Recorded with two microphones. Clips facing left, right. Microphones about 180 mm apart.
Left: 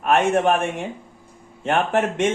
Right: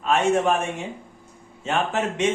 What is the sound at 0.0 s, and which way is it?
A man's voice, 60° left (ahead or behind).